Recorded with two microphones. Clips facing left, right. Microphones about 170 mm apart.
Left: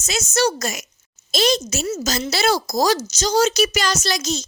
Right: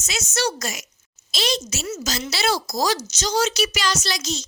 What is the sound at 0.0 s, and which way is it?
A woman's voice, 40° left (ahead or behind).